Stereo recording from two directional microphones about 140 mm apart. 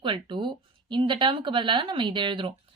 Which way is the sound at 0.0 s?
35° right (ahead or behind).